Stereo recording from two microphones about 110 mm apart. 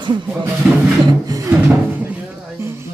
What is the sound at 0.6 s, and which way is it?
Speech, 10° right (ahead or behind).